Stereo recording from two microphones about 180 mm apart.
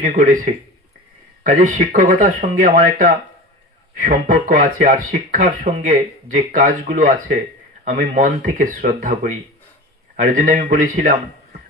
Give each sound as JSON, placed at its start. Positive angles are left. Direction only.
{"t": 0.0, "sound": "speech", "side_deg": -45}